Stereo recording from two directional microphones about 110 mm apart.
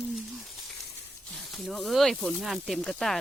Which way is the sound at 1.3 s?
Centre (ahead or behind).